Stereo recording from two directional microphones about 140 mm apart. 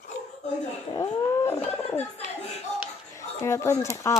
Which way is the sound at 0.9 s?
30° left (ahead or behind).